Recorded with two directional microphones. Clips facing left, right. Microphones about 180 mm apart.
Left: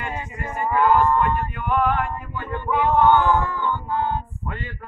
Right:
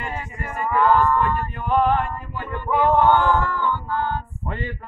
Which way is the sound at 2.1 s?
20° left (ahead or behind).